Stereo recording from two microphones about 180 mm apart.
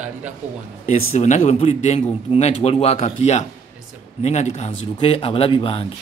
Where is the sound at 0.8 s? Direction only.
40° left (ahead or behind).